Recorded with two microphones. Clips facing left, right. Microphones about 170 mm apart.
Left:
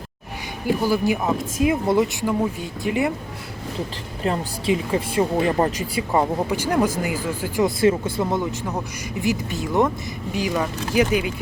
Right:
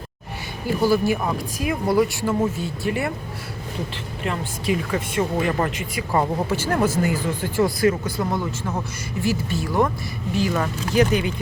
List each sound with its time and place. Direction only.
0.8 s speech: 15° left (ahead or behind)
4.2 s a woman's voice: 30° left (ahead or behind)
6.1 s speech: 15° left (ahead or behind)
7.8 s speech: 25° left (ahead or behind); by 11.3 s 10° left (ahead or behind)